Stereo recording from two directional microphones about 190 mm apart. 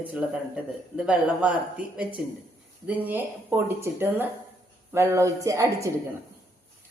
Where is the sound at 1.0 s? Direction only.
5° right (ahead or behind).